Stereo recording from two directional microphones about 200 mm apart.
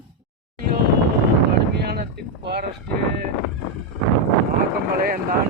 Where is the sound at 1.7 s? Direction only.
55° right (ahead or behind).